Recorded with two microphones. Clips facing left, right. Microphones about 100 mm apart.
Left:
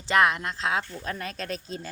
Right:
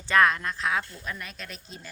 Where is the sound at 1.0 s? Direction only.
40° left (ahead or behind).